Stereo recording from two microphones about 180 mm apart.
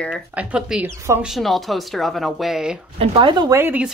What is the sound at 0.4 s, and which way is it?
Speech, 5° right (ahead or behind).